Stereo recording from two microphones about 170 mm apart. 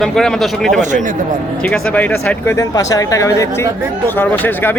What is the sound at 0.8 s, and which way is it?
Speech, 45° right (ahead or behind).